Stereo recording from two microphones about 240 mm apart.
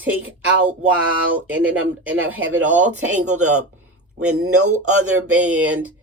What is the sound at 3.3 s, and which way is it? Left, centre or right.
Speech, right.